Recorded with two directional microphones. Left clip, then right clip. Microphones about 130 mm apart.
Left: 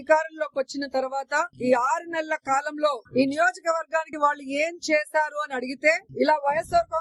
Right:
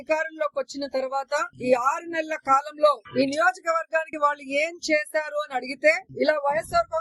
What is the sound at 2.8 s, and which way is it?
Speech, 50° left (ahead or behind).